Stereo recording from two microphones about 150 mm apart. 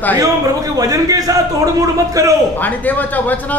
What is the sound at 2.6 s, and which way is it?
Speech, 10° left (ahead or behind).